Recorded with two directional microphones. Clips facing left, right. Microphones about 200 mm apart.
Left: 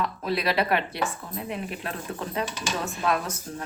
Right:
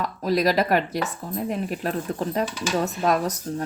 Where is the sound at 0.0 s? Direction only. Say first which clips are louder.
Right 5 dB; 40° right (ahead or behind).